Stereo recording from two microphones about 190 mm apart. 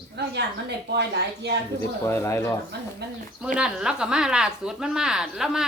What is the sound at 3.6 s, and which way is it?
A woman's voice, 5° right (ahead or behind).